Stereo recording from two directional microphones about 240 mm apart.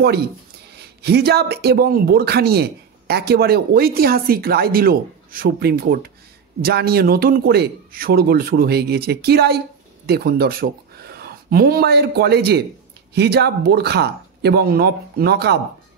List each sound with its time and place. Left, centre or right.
1.0 s a man's voice: right